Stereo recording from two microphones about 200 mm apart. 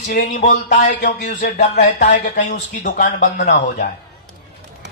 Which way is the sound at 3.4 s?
55° left (ahead or behind).